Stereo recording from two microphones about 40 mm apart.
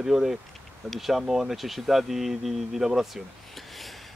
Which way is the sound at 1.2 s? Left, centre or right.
Centre.